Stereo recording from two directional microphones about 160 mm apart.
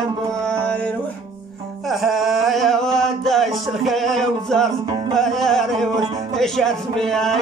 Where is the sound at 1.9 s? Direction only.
Centre (ahead or behind).